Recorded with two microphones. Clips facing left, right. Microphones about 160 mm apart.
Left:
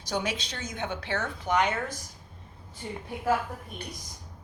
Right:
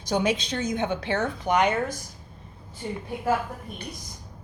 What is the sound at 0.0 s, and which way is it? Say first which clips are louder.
A woman's voice: right 7 dB; 20° right (ahead or behind).